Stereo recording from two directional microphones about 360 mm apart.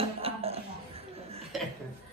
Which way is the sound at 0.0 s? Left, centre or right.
Centre.